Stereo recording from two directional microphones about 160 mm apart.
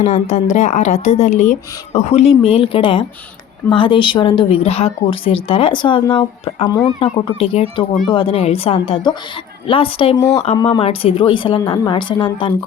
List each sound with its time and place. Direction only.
0.0 s a woman's voice: 45° left (ahead or behind); by 12.5 s 30° left (ahead or behind)